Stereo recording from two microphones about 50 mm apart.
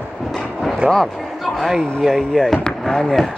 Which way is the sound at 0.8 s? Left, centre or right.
Centre.